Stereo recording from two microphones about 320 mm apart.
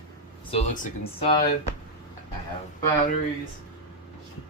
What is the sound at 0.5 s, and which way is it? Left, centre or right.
Speech, left.